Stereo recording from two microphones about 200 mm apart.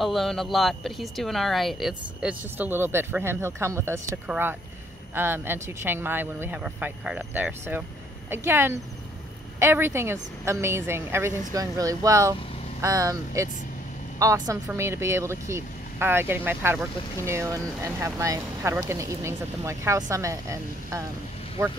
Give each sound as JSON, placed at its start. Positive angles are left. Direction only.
{"t": 0.0, "sound": "speech", "side_deg": 0}